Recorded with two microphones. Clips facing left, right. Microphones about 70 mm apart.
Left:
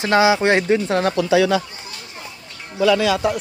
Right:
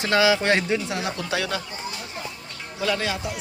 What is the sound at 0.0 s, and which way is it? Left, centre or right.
Speech, left.